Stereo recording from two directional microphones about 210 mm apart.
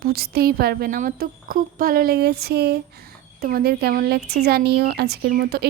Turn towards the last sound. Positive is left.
turn(degrees=-45)  # may be behind; listen again after turning